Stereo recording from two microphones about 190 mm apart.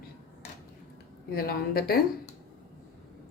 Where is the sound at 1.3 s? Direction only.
55° left (ahead or behind).